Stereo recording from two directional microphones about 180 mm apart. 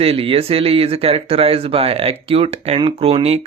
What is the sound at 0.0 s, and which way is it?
Speech, 30° right (ahead or behind).